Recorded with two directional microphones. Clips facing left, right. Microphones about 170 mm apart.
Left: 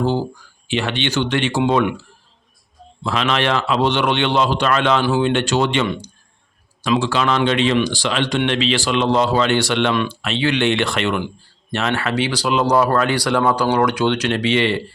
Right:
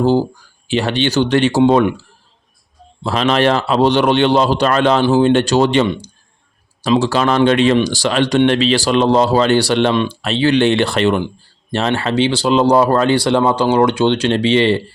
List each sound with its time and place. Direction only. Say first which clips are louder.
0.0 s a man's voice: right 6 dB; 35° right (ahead or behind)
3.0 s a man's voice: right 5 dB; 35° right (ahead or behind)